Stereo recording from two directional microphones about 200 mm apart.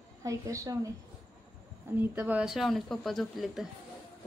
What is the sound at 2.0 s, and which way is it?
Speech, 10° right (ahead or behind).